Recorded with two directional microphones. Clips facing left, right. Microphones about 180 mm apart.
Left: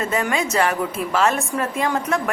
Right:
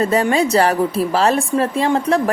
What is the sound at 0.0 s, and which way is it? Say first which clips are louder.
A woman's voice: right 7 dB; 35° right (ahead or behind).